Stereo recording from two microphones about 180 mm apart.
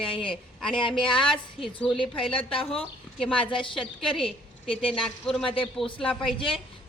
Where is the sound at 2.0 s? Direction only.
30° left (ahead or behind).